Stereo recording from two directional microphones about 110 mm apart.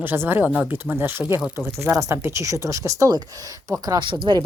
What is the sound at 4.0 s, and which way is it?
Speech, 45° right (ahead or behind).